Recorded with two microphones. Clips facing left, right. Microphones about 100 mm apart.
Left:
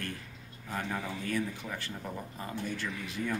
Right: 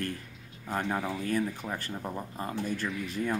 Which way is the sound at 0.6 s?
45° right (ahead or behind).